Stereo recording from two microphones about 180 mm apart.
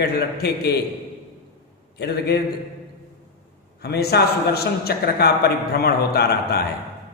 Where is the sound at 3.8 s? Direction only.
65° left (ahead or behind).